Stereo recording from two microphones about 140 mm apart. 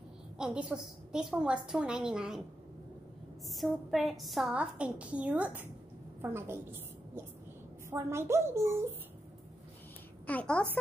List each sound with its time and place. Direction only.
0.4 s a woman's voice: 5° right (ahead or behind)
3.4 s a woman's voice: centre (ahead or behind); by 6.6 s 15° right (ahead or behind)
7.9 s a woman's voice: 20° right (ahead or behind)
10.2 s a woman's voice: 10° left (ahead or behind)